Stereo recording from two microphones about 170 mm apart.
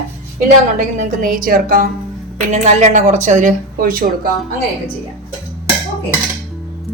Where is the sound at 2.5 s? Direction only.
45° right (ahead or behind).